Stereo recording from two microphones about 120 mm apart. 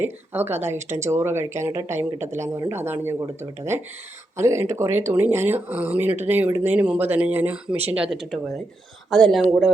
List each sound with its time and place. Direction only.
0.0 s speech: 15° right (ahead or behind); by 9.7 s centre (ahead or behind)